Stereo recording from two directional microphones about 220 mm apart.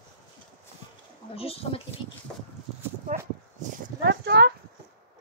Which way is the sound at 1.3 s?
25° left (ahead or behind).